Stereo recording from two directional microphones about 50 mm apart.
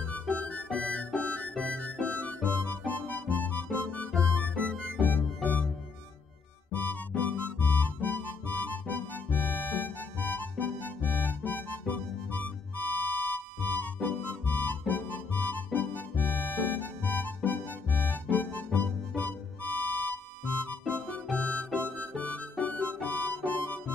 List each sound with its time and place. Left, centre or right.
0.4 s music: left
4.4 s music: left
5.0 s music: left
6.7 s music: left
20.8 s music: left
21.4 s harmonica: left
21.8 s music: left
23.0 s harmonica: left